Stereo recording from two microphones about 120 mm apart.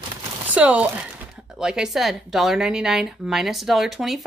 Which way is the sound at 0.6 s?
10° right (ahead or behind).